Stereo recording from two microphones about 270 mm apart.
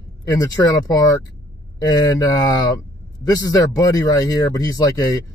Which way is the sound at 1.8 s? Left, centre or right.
Centre.